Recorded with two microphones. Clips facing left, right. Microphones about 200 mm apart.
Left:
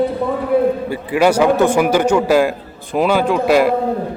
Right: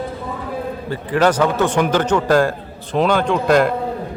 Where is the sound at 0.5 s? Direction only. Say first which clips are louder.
Left 13 dB; 65° left (ahead or behind).